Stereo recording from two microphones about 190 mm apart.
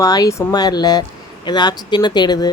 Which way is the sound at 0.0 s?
20° left (ahead or behind).